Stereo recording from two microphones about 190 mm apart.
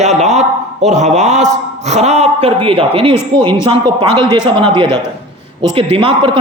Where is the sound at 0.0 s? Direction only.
35° right (ahead or behind).